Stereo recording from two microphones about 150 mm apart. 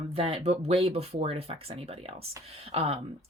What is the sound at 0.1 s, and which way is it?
Speech, 40° right (ahead or behind).